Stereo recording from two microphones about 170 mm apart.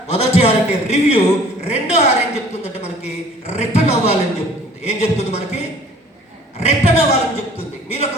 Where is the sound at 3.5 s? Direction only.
40° left (ahead or behind).